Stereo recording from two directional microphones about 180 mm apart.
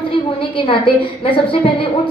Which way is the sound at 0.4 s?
30° left (ahead or behind).